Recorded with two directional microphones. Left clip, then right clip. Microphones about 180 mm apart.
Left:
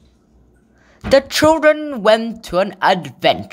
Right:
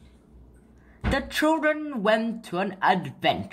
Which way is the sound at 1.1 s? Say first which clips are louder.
Left 12 dB; 45° left (ahead or behind).